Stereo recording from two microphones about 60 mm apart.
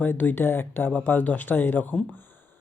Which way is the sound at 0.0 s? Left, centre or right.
Left.